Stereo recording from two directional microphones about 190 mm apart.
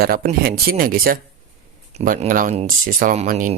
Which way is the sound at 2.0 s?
40° right (ahead or behind).